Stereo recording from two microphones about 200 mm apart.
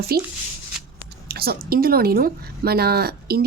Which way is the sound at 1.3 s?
50° right (ahead or behind).